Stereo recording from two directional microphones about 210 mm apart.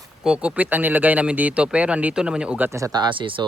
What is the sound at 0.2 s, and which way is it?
Speech, 5° right (ahead or behind).